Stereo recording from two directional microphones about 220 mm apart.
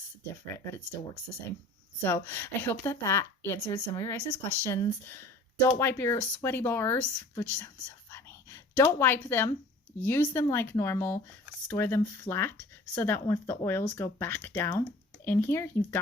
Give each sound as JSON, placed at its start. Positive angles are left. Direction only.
{"t": 0.4, "sound": "a woman's voice", "side_deg": 10}
{"t": 2.0, "sound": "a woman's voice", "side_deg": 10}